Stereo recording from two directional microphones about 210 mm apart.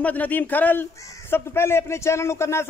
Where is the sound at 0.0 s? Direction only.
5° left (ahead or behind).